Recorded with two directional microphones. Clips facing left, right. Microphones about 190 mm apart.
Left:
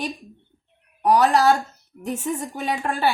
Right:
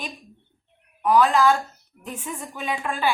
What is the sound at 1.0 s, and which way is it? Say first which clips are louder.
A woman's voice: left 1 dB; 40° left (ahead or behind).